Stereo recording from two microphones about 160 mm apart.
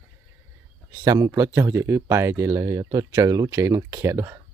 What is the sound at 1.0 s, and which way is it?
Speech, 20° right (ahead or behind).